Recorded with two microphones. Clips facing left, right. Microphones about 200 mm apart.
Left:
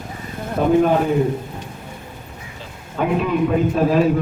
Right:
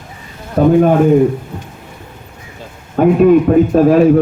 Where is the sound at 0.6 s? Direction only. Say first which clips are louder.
Right 7 dB; 50° right (ahead or behind).